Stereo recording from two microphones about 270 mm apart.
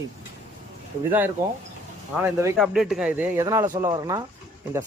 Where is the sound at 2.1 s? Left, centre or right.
Centre.